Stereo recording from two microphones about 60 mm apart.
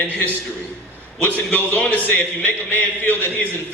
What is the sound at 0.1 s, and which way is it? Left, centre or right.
Speech, left.